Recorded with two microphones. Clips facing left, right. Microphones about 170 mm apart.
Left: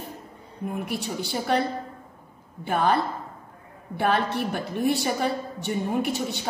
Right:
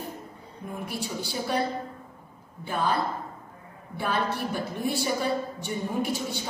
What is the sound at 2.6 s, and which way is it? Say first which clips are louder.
A woman's voice: left 4 dB; 60° left (ahead or behind).